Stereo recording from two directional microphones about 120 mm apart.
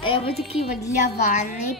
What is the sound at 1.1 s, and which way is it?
Speech, 85° left.